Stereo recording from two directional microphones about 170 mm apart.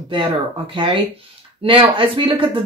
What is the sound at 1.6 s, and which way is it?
Speech, 30° right (ahead or behind).